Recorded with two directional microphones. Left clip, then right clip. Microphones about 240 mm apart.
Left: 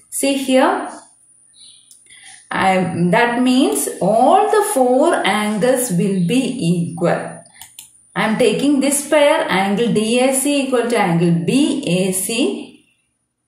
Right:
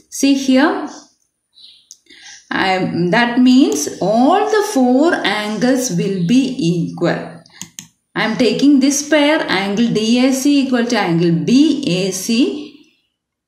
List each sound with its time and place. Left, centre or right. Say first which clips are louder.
0.2 s a woman's voice: right 1 dB; right
2.0 s a woman's voice: right 2 dB; right